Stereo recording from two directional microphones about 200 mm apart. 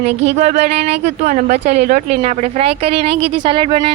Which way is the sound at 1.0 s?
35° right (ahead or behind).